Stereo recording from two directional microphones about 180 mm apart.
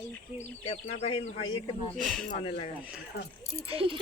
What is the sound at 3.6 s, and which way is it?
Speech, 30° right (ahead or behind).